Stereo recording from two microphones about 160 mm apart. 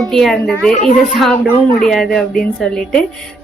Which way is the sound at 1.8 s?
Centre (ahead or behind).